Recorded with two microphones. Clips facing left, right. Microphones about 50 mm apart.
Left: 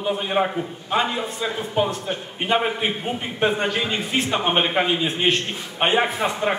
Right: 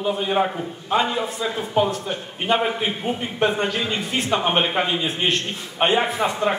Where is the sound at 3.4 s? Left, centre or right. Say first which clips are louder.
Even; centre.